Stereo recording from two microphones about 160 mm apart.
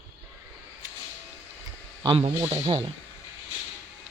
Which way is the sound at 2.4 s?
20° right (ahead or behind).